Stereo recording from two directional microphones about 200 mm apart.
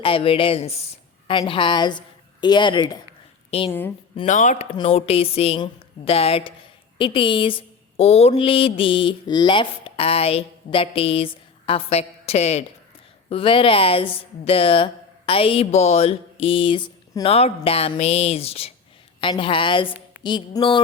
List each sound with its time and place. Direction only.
0.0 s a woman's voice: 25° left (ahead or behind)
3.7 s a woman's voice: 10° left (ahead or behind)
4.1 s speech: 25° left (ahead or behind)
4.4 s a woman's voice: 40° left (ahead or behind)